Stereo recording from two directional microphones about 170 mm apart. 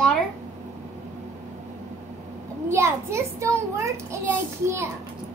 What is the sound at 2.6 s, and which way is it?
A child's voice, 15° right (ahead or behind).